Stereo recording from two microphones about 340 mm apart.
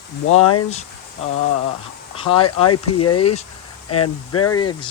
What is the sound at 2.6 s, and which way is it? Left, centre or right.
Speech, left.